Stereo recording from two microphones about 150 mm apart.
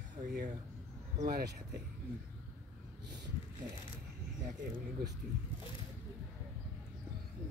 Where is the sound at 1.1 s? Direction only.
75° right (ahead or behind).